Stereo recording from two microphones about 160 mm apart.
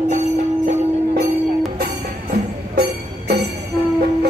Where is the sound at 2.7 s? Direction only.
90° right.